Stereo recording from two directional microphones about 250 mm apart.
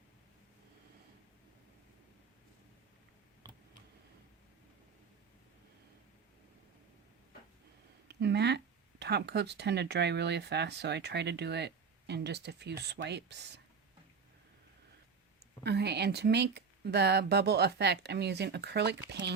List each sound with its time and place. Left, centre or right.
8.0 s speech: right
15.6 s speech: right